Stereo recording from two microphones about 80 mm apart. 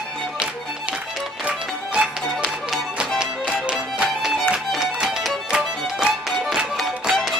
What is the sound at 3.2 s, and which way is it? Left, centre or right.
Music, centre.